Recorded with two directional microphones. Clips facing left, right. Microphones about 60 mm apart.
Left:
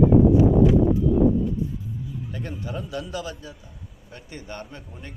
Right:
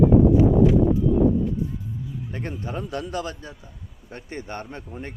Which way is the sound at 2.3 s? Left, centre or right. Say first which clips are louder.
Right 2 dB; right.